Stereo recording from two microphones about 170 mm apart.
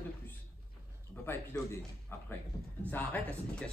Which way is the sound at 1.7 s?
15° left (ahead or behind).